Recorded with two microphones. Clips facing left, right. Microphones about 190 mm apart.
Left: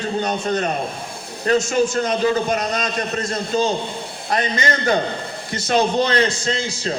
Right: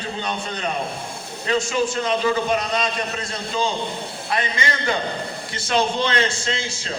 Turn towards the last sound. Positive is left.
turn(degrees=40)  # may be behind; listen again after turning